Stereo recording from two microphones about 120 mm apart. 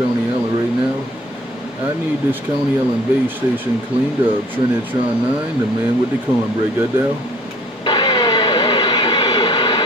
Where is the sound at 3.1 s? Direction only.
15° right (ahead or behind).